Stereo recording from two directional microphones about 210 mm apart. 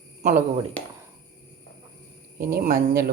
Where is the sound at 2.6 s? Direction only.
50° right (ahead or behind).